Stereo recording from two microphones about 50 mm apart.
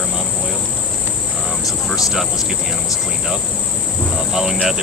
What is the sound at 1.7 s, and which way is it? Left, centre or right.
Speech, centre.